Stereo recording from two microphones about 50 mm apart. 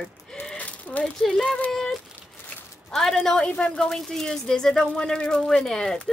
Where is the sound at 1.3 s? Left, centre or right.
Centre.